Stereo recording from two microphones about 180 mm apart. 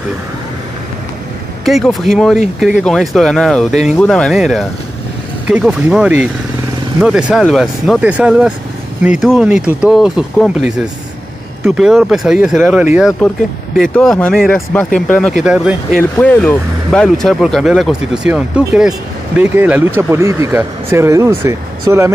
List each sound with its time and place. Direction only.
1.6 s speech: centre (ahead or behind)
11.6 s speech: 5° right (ahead or behind)
13.9 s speech: 5° left (ahead or behind)
15.4 s speech: 5° right (ahead or behind)
16.0 s speech: 5° left (ahead or behind); by 22.1 s 15° right (ahead or behind)